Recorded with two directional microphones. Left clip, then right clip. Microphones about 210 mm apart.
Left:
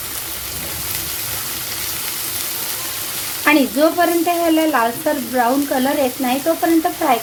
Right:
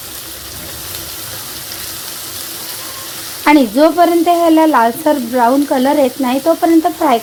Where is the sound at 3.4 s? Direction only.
35° right (ahead or behind).